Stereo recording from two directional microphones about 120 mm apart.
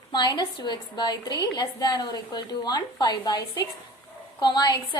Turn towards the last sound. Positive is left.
turn(degrees=35)  # may be behind; listen again after turning